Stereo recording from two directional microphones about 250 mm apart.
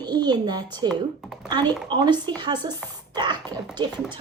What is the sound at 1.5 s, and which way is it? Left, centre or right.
Speech, centre.